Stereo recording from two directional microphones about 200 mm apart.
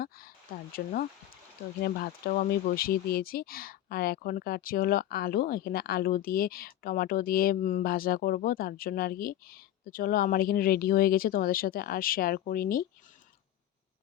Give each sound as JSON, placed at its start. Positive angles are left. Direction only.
{"t": 0.0, "sound": "speech", "side_deg": 45}